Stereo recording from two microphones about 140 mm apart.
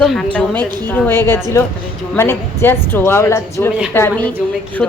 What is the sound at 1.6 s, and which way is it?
A woman's voice, 20° left (ahead or behind).